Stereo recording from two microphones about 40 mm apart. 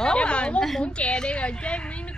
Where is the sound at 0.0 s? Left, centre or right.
Left.